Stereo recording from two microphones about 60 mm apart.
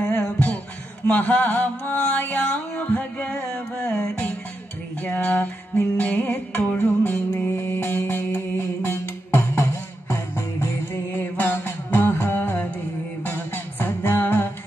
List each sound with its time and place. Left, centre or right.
0.0 s music: left
5.0 s music: left